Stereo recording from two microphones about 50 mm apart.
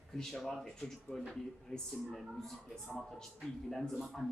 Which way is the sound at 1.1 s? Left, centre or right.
Left.